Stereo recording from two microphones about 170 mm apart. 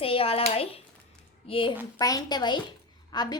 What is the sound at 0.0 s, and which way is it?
A child's voice, 35° left (ahead or behind).